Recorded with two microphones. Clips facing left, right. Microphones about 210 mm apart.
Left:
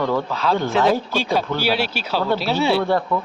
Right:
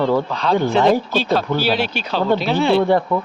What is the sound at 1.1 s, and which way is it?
Speech, 10° left (ahead or behind).